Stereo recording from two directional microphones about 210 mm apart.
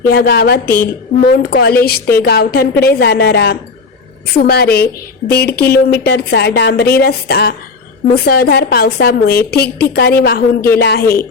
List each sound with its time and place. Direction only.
0.1 s a woman's voice: 45° left (ahead or behind)